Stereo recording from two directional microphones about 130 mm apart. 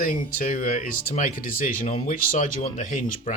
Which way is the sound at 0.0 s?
90° left.